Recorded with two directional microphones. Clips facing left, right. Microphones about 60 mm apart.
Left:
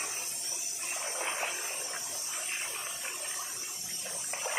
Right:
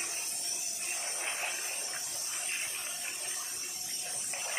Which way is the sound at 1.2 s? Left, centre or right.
Left.